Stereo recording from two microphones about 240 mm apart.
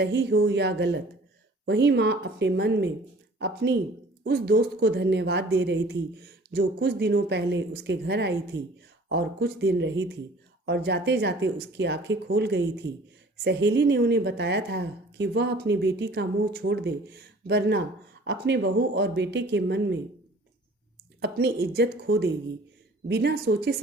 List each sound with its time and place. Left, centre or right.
0.0 s speech: right
21.2 s speech: right